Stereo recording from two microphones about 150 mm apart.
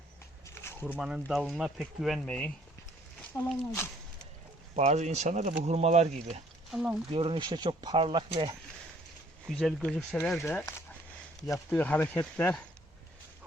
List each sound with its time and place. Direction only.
0.4 s a sound: 15° left (ahead or behind)
0.9 s speech: 5° right (ahead or behind)
3.3 s speech: 20° left (ahead or behind)
4.7 s speech: 50° right (ahead or behind)
6.7 s speech: centre (ahead or behind)
7.1 s speech: 40° right (ahead or behind)
9.5 s speech: centre (ahead or behind)
10.4 s speech: 15° left (ahead or behind)